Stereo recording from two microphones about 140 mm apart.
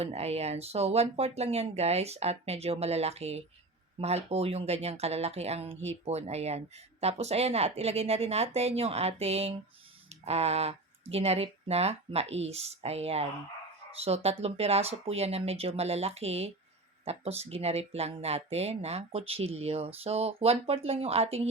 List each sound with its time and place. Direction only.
0.0 s speech: 50° right (ahead or behind)